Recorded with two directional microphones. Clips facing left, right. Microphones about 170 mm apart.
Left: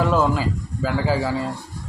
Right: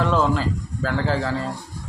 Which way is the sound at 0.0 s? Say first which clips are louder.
Left 1 dB; 10° left (ahead or behind).